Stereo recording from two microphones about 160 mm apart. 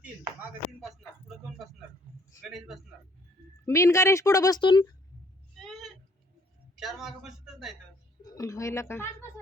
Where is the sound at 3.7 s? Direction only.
20° left (ahead or behind).